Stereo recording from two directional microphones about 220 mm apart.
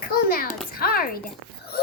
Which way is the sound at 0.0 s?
40° left (ahead or behind).